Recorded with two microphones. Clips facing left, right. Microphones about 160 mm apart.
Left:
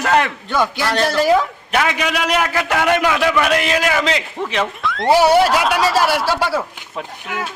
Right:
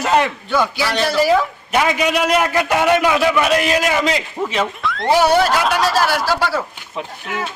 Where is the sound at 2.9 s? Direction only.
5° right (ahead or behind).